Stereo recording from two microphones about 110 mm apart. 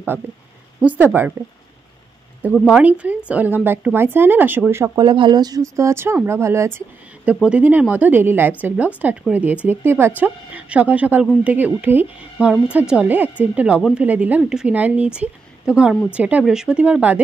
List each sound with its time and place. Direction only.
0.7 s speech: 15° right (ahead or behind)
2.5 s speech: 5° right (ahead or behind); by 4.9 s 20° right (ahead or behind)
4.9 s speech: 45° right (ahead or behind); by 6.8 s 25° right (ahead or behind)
7.4 s speech: 15° right (ahead or behind)